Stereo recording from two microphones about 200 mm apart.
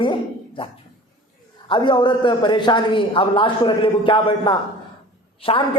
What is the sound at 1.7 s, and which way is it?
A man's voice, 25° left (ahead or behind).